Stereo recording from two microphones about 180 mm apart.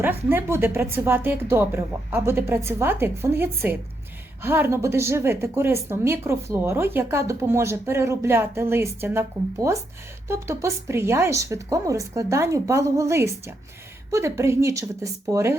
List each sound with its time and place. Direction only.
0.0 s a woman's voice: 10° right (ahead or behind)